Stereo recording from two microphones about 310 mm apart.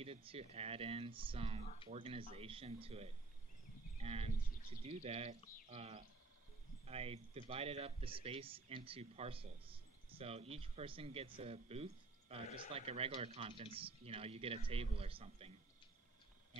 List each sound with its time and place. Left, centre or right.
0.0 s speech: centre